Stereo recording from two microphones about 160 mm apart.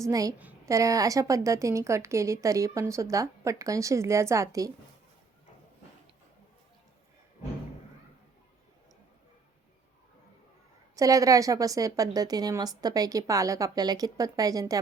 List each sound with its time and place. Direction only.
0.0 s a woman's voice: 20° right (ahead or behind)
0.3 s a woman's voice: 10° right (ahead or behind)
0.7 s a woman's voice: 20° right (ahead or behind)
10.9 s a woman's voice: 20° right (ahead or behind)